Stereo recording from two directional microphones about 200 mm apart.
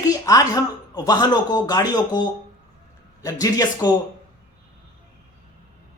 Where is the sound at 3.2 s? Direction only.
20° left (ahead or behind).